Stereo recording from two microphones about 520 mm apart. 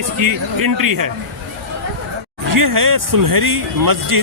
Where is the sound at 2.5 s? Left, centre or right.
Right.